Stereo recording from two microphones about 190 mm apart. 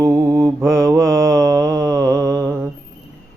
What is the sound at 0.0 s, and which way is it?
Mantra, 15° right (ahead or behind).